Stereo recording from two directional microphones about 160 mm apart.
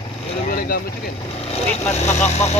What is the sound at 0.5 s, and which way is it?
Speech, 65° left (ahead or behind).